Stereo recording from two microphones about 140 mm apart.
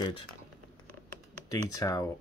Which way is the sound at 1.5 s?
25° left (ahead or behind).